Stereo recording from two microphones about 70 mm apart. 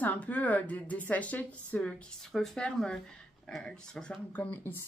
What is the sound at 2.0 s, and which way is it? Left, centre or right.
A woman's voice, centre.